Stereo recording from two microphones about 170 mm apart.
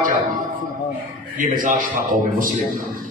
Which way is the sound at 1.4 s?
50° right (ahead or behind).